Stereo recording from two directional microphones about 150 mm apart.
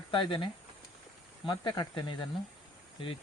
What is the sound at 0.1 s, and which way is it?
Speech, 35° left (ahead or behind).